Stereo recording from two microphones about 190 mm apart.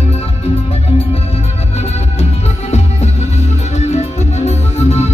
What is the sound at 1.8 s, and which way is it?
Music, 35° left (ahead or behind).